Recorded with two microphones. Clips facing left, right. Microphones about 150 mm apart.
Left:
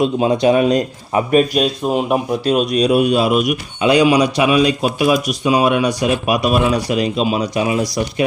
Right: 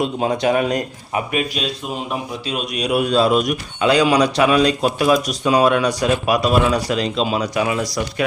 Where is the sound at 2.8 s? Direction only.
30° left (ahead or behind).